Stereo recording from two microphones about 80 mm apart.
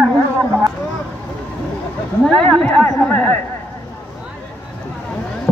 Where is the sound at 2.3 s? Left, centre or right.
Centre.